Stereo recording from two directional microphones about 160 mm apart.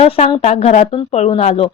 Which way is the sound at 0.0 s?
40° left (ahead or behind).